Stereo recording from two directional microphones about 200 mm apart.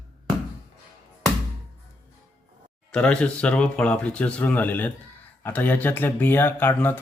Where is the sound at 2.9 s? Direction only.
5° left (ahead or behind).